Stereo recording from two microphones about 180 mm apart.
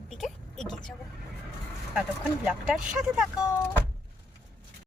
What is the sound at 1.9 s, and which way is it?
Speech, 5° right (ahead or behind).